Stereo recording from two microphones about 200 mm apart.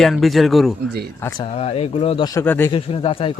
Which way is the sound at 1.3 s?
30° left (ahead or behind).